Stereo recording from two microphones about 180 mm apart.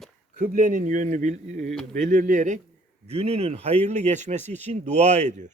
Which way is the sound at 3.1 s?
35° right (ahead or behind).